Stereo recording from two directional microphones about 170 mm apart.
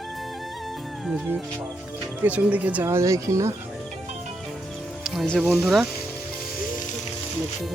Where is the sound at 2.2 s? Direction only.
10° right (ahead or behind).